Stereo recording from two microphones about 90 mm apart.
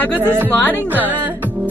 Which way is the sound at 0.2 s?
25° right (ahead or behind).